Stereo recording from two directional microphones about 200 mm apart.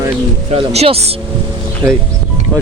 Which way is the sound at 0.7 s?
30° right (ahead or behind).